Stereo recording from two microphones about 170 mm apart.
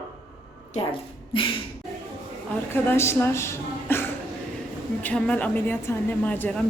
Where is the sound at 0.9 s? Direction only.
30° left (ahead or behind).